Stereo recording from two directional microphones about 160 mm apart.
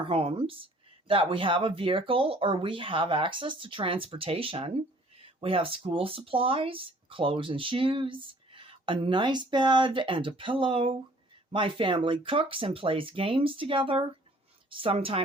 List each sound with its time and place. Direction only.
0.0 s speech: 35° right (ahead or behind)